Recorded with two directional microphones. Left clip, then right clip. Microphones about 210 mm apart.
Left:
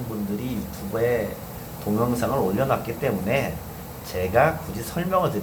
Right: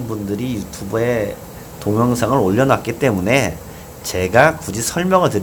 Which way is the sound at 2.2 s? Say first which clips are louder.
Right 8 dB; 60° right (ahead or behind).